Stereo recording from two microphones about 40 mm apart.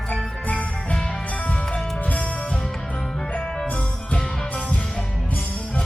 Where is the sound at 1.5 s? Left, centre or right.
Left.